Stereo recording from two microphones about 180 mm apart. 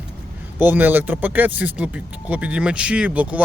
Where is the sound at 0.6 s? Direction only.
10° right (ahead or behind).